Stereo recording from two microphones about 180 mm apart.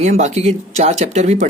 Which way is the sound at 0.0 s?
40° right (ahead or behind).